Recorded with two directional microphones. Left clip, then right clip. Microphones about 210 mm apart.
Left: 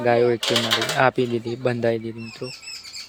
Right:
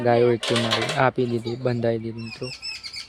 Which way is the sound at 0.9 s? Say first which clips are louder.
Left 2 dB; 5° left (ahead or behind).